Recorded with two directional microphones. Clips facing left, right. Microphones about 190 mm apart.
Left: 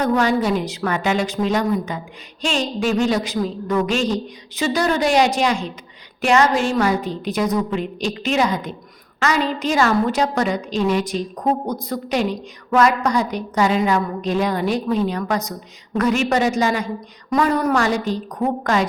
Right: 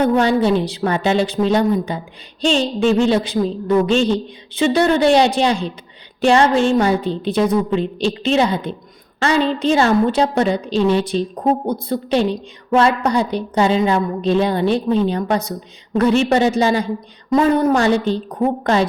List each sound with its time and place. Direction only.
0.0 s a woman's voice: 30° right (ahead or behind)